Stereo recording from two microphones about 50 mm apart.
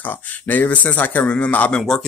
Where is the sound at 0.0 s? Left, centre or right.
Left.